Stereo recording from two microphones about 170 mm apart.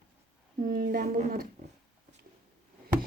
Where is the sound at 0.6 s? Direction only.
50° right (ahead or behind).